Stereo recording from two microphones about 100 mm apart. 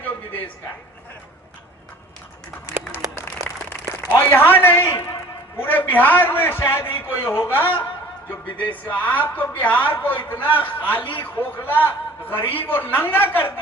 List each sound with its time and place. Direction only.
4.1 s a woman's voice: 20° left (ahead or behind)